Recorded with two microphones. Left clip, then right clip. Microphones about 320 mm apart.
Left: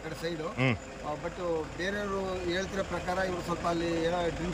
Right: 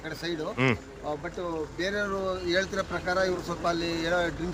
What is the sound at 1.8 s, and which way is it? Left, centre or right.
Speech, centre.